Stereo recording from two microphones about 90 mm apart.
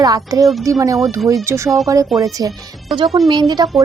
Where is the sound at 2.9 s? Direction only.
Centre (ahead or behind).